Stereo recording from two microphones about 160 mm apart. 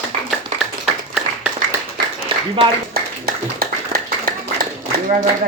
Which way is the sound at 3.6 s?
60° right (ahead or behind).